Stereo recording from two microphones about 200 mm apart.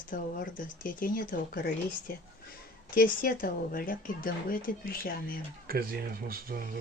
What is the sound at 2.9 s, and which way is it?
Speech, 45° left (ahead or behind).